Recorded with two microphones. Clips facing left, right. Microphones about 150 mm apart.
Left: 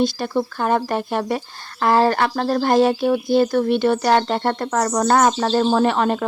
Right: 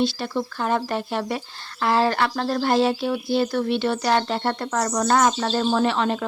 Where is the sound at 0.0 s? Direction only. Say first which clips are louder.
Left 4 dB; 45° left (ahead or behind).